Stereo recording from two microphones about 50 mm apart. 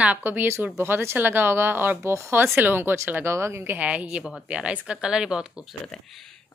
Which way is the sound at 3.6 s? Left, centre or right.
Right.